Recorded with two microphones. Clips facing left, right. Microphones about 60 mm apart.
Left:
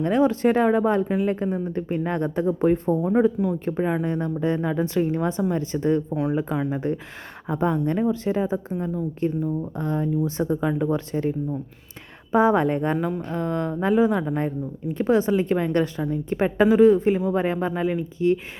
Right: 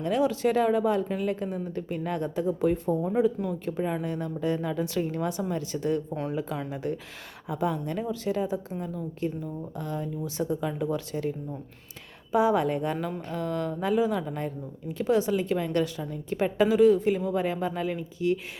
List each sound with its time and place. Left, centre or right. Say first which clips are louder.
0.0 s speech: left 5 dB; left
1.0 s a woman's voice: left 6 dB; left
13.0 s speech: left 6 dB; centre
13.2 s a woman's voice: left 4 dB; left